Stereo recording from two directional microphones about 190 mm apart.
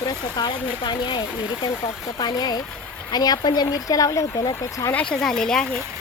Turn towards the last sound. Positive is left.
turn(degrees=5)  # may be behind; listen again after turning